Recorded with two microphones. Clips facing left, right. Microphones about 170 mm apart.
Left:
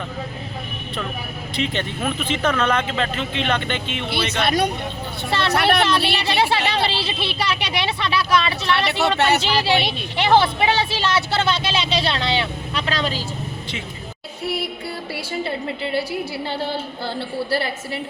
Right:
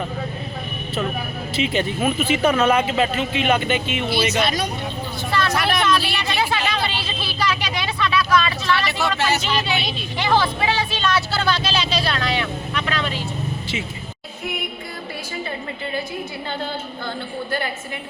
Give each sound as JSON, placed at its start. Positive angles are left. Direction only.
{"t": 1.5, "sound": "speech", "side_deg": -5}
{"t": 4.1, "sound": "speech", "side_deg": 60}
{"t": 5.8, "sound": "speech", "side_deg": 30}
{"t": 6.7, "sound": "a sound", "side_deg": 30}
{"t": 7.3, "sound": "speech", "side_deg": 25}
{"t": 8.8, "sound": "speech", "side_deg": 65}
{"t": 9.4, "sound": "speech", "side_deg": 30}
{"t": 14.4, "sound": "music", "side_deg": 35}